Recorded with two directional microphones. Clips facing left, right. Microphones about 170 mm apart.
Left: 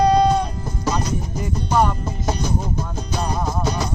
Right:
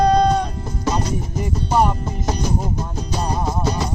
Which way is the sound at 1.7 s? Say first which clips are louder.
Right 1 dB; 10° right (ahead or behind).